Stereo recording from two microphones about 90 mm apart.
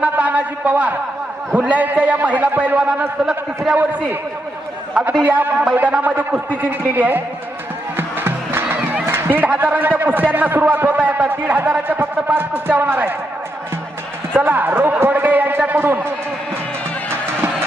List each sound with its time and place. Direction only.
0.0 s a sound: 20° right (ahead or behind)
1.5 s a man's voice: 15° right (ahead or behind)
3.8 s a man's voice: 20° right (ahead or behind)
5.2 s a man's voice: 20° right (ahead or behind)
7.9 s music: 25° right (ahead or behind)
9.0 s a man's voice: 25° right (ahead or behind)
14.3 s a man's voice: 20° right (ahead or behind)
17.1 s music: 25° right (ahead or behind)